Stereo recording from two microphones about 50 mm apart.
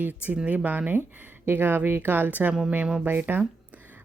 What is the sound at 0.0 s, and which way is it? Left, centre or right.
Speech, right.